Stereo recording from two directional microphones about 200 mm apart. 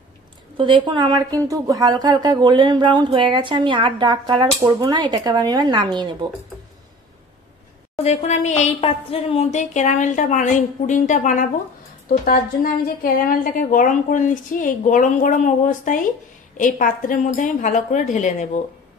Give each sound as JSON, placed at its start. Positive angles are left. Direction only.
{"t": 0.6, "sound": "a woman's voice", "side_deg": -25}
{"t": 8.0, "sound": "a woman's voice", "side_deg": 35}
{"t": 13.0, "sound": "a woman's voice", "side_deg": 45}